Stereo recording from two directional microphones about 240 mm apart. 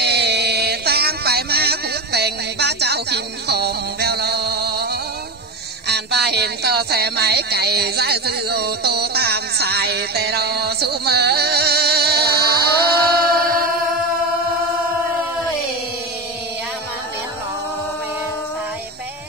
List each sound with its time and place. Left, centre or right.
0.0 s music: right
5.9 s speech: right